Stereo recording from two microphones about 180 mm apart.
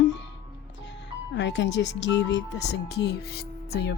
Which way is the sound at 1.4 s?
80° left.